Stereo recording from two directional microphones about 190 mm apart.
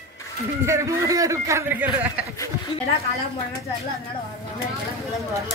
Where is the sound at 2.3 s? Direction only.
15° left (ahead or behind).